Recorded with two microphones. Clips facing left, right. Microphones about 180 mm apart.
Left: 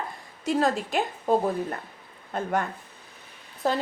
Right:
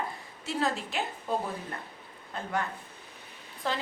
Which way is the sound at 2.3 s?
45° left (ahead or behind).